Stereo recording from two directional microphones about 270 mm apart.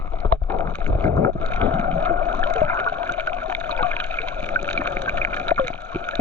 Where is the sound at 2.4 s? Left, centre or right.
Centre.